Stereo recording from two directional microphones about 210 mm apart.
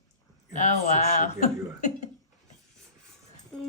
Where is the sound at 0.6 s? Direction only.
35° left (ahead or behind).